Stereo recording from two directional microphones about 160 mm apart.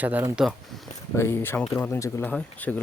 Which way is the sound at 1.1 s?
15° left (ahead or behind).